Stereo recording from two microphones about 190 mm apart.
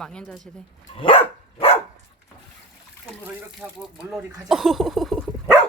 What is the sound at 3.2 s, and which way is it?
Speech, 5° right (ahead or behind).